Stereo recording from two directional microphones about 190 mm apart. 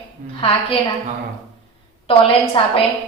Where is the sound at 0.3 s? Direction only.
30° left (ahead or behind).